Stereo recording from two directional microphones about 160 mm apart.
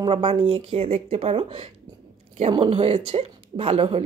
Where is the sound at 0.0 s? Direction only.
35° right (ahead or behind).